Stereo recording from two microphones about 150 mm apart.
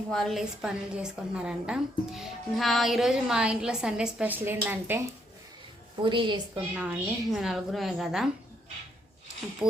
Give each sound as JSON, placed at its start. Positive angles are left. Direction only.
{"t": 0.1, "sound": "a woman's voice", "side_deg": 0}
{"t": 6.0, "sound": "a woman's voice", "side_deg": -35}
{"t": 6.7, "sound": "a woman's voice", "side_deg": -10}